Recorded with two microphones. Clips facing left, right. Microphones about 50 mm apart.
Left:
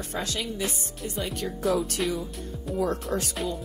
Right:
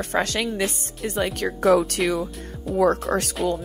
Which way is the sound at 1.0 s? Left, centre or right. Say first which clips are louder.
Right 7 dB; right.